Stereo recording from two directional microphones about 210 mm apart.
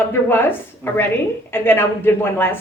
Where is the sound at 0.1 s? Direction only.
10° left (ahead or behind).